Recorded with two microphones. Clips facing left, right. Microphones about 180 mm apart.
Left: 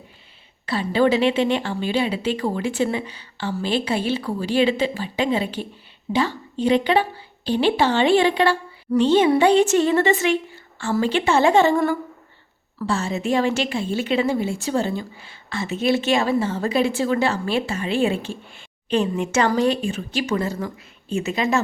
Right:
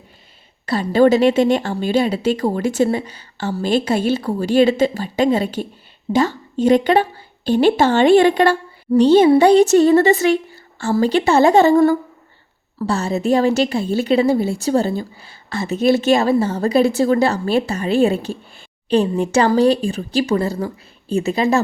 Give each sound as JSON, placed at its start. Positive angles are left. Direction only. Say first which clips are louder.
{"t": 0.6, "sound": "a woman's voice", "louder": "right 5 dB", "side_deg": -40}